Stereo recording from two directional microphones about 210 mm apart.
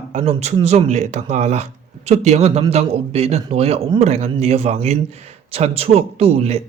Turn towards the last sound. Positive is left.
turn(degrees=-30)  # may be behind; listen again after turning